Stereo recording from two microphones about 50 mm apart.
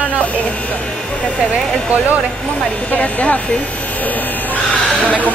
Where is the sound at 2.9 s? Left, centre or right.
Left.